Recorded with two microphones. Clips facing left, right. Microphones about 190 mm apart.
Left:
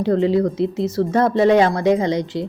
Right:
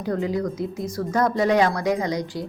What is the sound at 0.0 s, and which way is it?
Speech, 30° left (ahead or behind).